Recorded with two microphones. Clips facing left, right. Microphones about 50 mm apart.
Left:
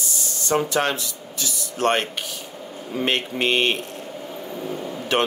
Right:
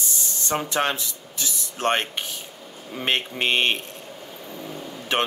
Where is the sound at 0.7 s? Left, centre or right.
Right.